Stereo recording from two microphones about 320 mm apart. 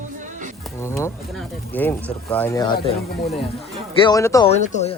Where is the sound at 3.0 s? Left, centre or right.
Left.